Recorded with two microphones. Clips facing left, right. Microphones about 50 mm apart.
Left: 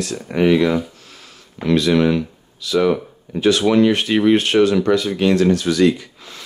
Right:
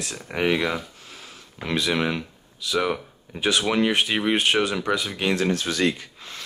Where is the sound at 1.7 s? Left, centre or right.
Centre.